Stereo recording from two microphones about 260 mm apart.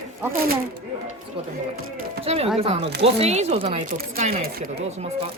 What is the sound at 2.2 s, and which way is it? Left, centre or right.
Speech, right.